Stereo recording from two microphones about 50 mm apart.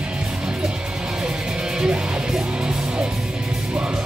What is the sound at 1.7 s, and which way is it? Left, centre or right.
Music, centre.